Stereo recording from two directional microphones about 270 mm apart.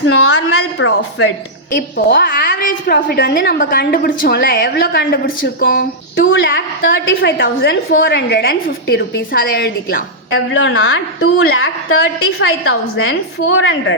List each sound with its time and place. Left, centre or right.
0.0 s a woman's voice: left